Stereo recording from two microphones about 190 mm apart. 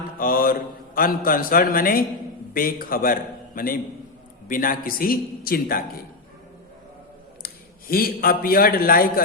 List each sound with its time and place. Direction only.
0.2 s mantra: 50° left (ahead or behind)
0.9 s a man's voice: 50° left (ahead or behind)
7.4 s a man's voice: 50° left (ahead or behind)